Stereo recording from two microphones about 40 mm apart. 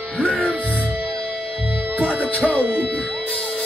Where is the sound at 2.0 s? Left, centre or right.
Right.